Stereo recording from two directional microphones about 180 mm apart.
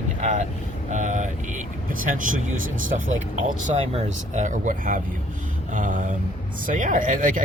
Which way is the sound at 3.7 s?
35° right (ahead or behind).